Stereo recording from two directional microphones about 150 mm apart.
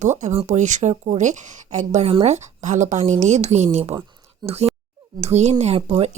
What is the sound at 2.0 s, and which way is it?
Speech, 45° right (ahead or behind).